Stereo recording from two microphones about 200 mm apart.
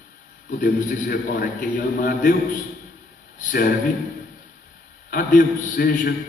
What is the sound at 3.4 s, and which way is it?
Speech, 45° left (ahead or behind).